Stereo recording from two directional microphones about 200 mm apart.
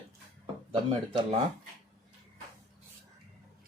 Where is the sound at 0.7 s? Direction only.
25° right (ahead or behind).